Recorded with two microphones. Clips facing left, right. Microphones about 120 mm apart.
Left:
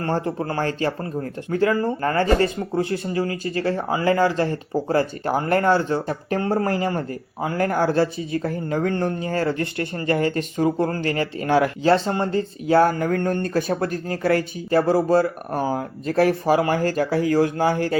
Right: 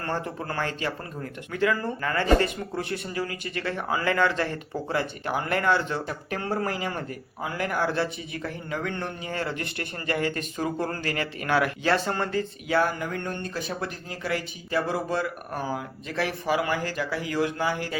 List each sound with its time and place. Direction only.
0.0 s speech: 35° left (ahead or behind)